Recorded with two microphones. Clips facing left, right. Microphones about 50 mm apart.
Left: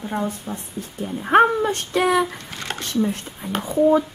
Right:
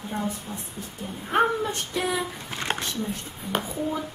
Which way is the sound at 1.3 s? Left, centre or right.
Left.